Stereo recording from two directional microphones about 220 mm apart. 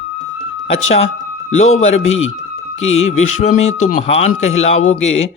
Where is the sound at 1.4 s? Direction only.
30° left (ahead or behind).